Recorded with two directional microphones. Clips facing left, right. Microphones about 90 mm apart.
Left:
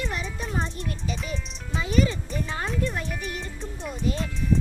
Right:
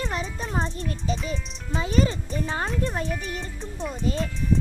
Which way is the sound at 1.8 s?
35° right (ahead or behind).